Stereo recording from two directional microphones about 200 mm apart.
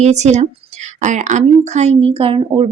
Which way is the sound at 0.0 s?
35° right (ahead or behind).